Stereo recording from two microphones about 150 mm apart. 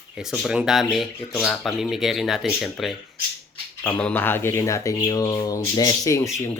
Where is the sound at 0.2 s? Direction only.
5° right (ahead or behind).